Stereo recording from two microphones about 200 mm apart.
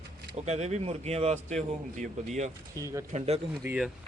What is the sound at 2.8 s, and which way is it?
Speech, 15° right (ahead or behind).